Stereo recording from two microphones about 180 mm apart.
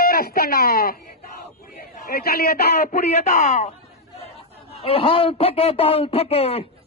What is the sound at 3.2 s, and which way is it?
Speech, 40° left (ahead or behind).